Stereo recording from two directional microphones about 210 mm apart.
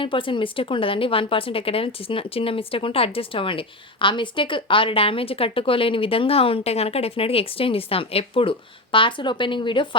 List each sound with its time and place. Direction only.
0.0 s speech: 25° left (ahead or behind)